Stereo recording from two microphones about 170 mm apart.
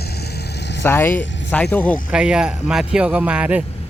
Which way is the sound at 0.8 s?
10° left (ahead or behind).